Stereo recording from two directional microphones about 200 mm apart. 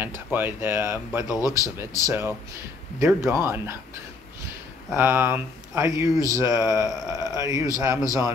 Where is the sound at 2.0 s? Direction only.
10° right (ahead or behind).